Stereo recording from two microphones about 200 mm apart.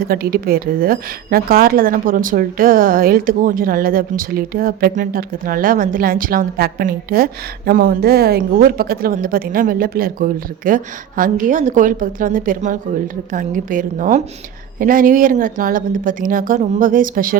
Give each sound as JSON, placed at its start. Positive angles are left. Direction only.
{"t": 0.0, "sound": "a woman's voice", "side_deg": -50}